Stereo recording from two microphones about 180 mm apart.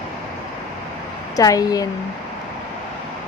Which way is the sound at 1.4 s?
20° left (ahead or behind).